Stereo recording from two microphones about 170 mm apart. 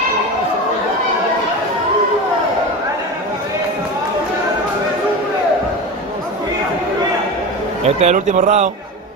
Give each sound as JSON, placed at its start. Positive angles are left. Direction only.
{"t": 8.0, "sound": "a man's voice", "side_deg": -40}